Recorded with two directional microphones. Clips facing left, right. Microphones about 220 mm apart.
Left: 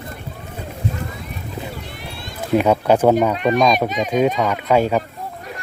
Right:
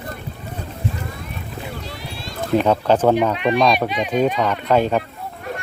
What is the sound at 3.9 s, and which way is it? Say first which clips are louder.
Speech: left 1 dB; 45° left (ahead or behind).